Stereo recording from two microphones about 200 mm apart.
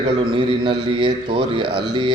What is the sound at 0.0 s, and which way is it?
A man's voice, 25° right (ahead or behind).